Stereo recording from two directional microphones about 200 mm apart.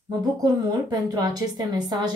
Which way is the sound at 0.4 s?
20° right (ahead or behind).